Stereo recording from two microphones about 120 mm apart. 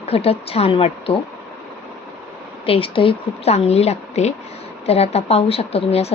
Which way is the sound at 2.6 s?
50° left (ahead or behind).